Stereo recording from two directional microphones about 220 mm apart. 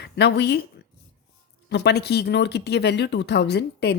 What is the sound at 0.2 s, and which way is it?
Speech, 50° left (ahead or behind).